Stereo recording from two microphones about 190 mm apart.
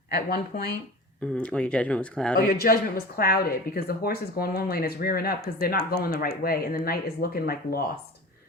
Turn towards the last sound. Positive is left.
turn(degrees=50)  # may be behind; listen again after turning